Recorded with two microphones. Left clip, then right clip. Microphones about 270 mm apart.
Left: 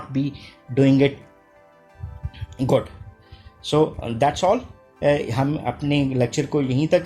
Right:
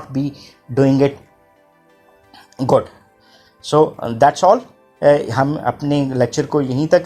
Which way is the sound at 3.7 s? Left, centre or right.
Right.